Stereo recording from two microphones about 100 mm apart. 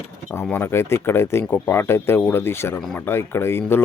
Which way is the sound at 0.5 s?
25° left (ahead or behind).